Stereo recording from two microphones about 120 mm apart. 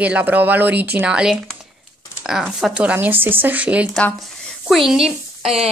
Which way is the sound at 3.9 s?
5° left (ahead or behind).